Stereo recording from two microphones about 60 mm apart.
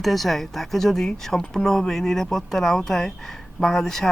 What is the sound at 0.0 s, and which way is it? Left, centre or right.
Speech, centre.